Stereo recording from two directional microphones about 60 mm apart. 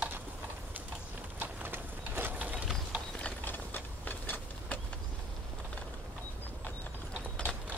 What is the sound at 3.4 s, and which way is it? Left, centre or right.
Mechanisms, left.